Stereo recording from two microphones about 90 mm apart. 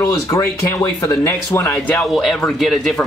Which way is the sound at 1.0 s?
35° left (ahead or behind).